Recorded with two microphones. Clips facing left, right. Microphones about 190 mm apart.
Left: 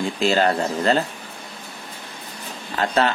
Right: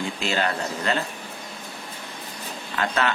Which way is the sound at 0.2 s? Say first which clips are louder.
Left 8 dB; 35° left (ahead or behind).